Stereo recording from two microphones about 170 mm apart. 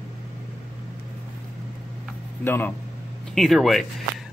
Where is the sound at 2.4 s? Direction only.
15° left (ahead or behind).